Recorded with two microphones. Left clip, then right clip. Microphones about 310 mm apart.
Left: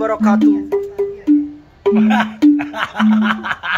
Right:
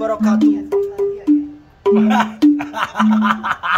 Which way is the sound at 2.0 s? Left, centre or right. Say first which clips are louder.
Even; centre.